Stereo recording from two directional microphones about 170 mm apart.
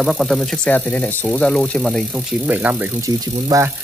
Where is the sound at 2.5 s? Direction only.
10° right (ahead or behind).